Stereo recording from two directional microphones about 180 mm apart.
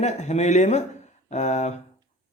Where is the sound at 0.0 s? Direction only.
40° left (ahead or behind).